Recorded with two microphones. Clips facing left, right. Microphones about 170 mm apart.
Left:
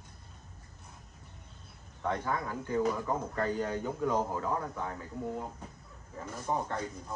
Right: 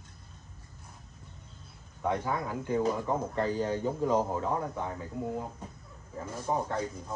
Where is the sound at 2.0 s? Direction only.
10° right (ahead or behind).